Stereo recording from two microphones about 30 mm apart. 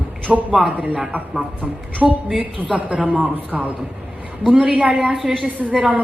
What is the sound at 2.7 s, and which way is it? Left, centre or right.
Speech, right.